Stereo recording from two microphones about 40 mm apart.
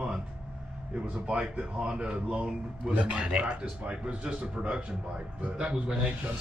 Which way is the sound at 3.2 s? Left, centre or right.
Right.